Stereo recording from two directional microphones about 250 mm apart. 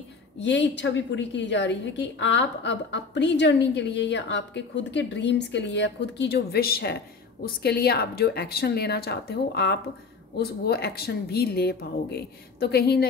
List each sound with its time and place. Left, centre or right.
0.4 s a woman's voice: left